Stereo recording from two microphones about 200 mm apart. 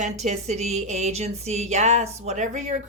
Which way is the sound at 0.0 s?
35° right (ahead or behind).